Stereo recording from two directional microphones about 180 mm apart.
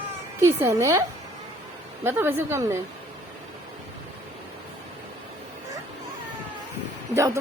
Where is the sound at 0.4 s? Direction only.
15° right (ahead or behind).